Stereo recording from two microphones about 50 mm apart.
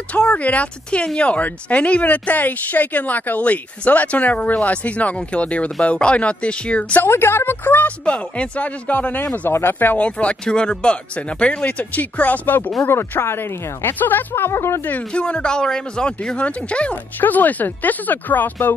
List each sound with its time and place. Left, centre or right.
0.1 s speech: left
7.0 s speech: left
8.0 s speech: left
9.5 s speech: left
9.9 s speech: left
11.6 s speech: left
12.8 s speech: left
14.8 s speech: left
15.1 s speech: left
17.2 s speech: left